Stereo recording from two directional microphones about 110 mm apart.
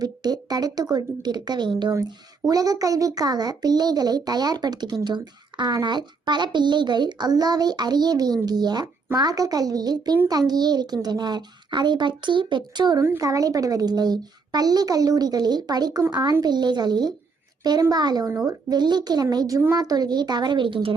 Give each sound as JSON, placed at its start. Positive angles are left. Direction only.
{"t": 0.0, "sound": "a child's voice", "side_deg": -35}
{"t": 13.1, "sound": "a child's voice", "side_deg": -30}